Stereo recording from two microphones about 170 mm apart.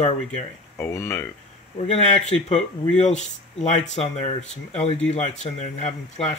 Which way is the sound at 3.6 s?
40° left (ahead or behind).